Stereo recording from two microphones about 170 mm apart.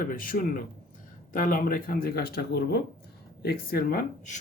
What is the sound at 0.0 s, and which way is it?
Speech, 55° left (ahead or behind).